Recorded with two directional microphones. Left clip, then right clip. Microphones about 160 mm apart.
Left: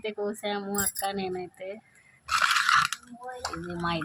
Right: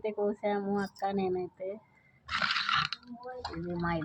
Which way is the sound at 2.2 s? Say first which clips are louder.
Left 7 dB; 15° left (ahead or behind).